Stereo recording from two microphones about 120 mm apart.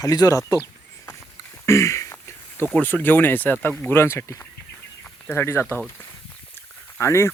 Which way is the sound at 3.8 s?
20° left (ahead or behind).